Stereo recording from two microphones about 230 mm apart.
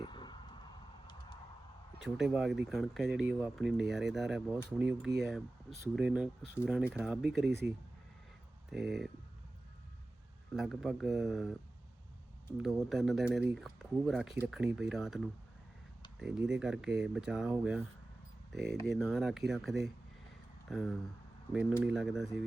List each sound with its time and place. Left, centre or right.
0.0 s vehicle: centre
2.0 s speech: centre
8.7 s speech: centre
10.5 s speech: centre
12.6 s speech: centre